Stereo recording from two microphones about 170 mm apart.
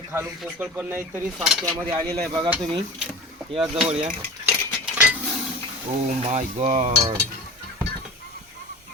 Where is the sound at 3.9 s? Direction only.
35° right (ahead or behind).